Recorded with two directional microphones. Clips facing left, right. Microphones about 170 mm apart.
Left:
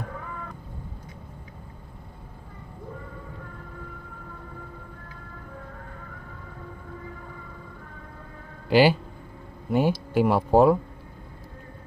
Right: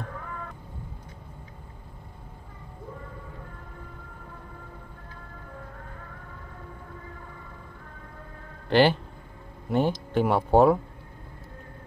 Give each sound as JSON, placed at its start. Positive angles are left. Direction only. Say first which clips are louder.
{"t": 8.6, "sound": "speech", "louder": "left 2 dB", "side_deg": 5}